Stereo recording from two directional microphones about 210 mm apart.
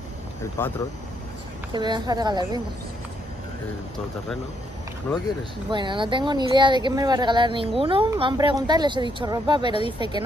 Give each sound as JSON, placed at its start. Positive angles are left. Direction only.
{"t": 0.6, "sound": "speech", "side_deg": 10}
{"t": 1.7, "sound": "speech", "side_deg": -20}
{"t": 5.1, "sound": "speech", "side_deg": 5}
{"t": 5.7, "sound": "speech", "side_deg": -20}